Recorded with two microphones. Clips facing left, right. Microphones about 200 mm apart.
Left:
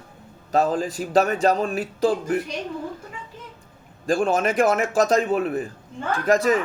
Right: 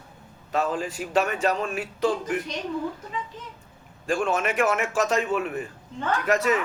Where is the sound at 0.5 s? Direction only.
35° left (ahead or behind).